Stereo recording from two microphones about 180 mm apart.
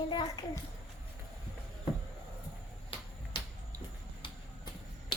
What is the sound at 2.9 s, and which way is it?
Finger snapping, 30° left (ahead or behind).